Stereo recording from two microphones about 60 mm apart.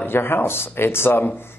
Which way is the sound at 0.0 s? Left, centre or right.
Left.